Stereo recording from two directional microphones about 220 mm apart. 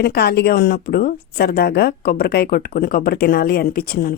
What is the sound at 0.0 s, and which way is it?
A woman's voice, 45° left (ahead or behind).